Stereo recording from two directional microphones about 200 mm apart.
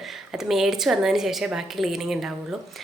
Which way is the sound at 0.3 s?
Centre (ahead or behind).